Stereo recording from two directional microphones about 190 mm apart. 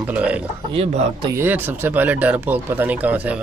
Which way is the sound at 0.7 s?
30° right (ahead or behind).